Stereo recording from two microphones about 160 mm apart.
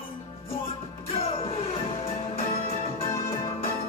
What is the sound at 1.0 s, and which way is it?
Music, 35° left (ahead or behind).